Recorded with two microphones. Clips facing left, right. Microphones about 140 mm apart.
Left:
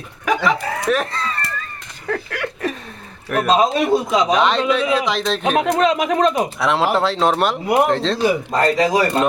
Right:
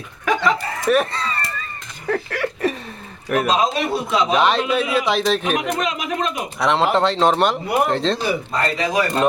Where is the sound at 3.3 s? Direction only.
Centre (ahead or behind).